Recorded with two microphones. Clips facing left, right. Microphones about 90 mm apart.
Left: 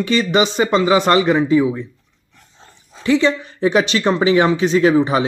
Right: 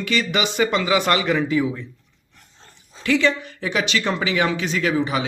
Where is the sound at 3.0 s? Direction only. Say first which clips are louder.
Left 4 dB; 25° left (ahead or behind).